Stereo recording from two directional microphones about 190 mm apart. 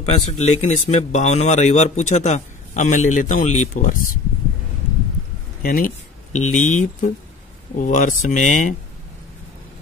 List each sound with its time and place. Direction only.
0.0 s speech: 35° left (ahead or behind)
5.6 s speech: 45° left (ahead or behind)